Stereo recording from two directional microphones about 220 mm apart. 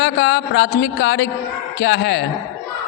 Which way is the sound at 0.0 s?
50° left (ahead or behind).